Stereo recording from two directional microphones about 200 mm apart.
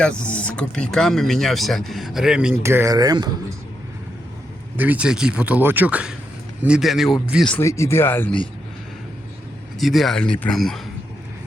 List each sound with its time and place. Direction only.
0.0 s speech: 5° left (ahead or behind); by 3.2 s 20° right (ahead or behind)
4.8 s speech: 5° right (ahead or behind); by 8.4 s 10° left (ahead or behind)
9.8 s speech: centre (ahead or behind)